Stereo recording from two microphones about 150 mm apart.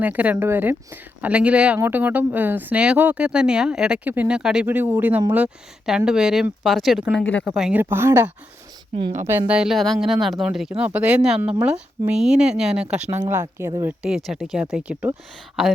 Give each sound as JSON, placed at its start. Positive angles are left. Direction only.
{"t": 0.0, "sound": "a woman's voice", "side_deg": -10}
{"t": 7.4, "sound": "a woman's voice", "side_deg": -5}
{"t": 9.5, "sound": "speech", "side_deg": -5}
{"t": 13.2, "sound": "speech", "side_deg": -20}
{"t": 14.3, "sound": "speech", "side_deg": 0}